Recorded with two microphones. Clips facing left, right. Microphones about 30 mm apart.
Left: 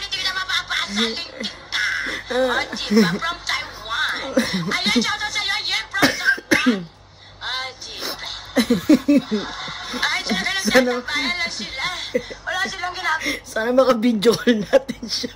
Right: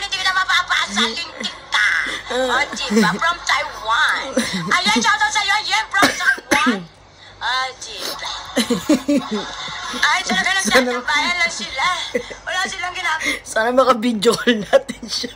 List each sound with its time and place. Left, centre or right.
0.0 s music: right
2.9 s a woman's voice: right
3.9 s a sound: right
4.6 s a woman's voice: right
5.4 s a woman's voice: right
5.9 s chuckle: right
7.4 s a woman's voice: right
8.5 s a sound: right
9.3 s a woman's voice: right
13.6 s speech: right